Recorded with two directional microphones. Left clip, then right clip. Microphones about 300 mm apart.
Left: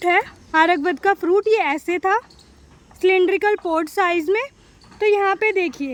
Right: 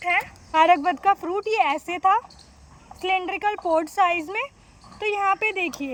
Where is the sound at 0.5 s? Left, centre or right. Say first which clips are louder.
Left 1 dB; centre.